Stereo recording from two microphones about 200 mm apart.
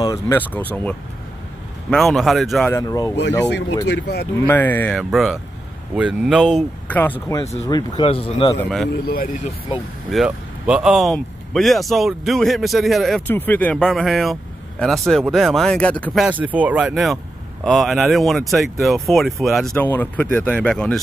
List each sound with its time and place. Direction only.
0.0 s speech: 15° left (ahead or behind)
2.7 s speech: 20° left (ahead or behind)
3.2 s speech: 60° left (ahead or behind)
4.5 s speech: 10° left (ahead or behind)
6.9 s speech: 10° left (ahead or behind); by 8.5 s 25° left (ahead or behind)
9.0 s speech: 45° left (ahead or behind)
10.1 s speech: 5° right (ahead or behind)
16.3 s speech: 10° right (ahead or behind)